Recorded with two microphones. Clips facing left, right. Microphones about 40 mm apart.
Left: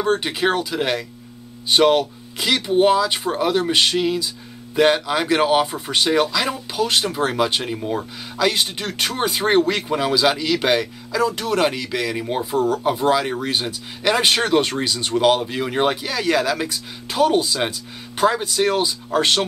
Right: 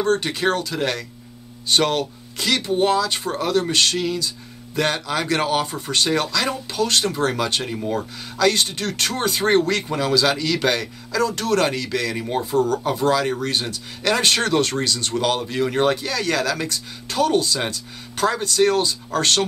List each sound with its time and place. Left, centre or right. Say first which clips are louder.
0.0 s speech: even; centre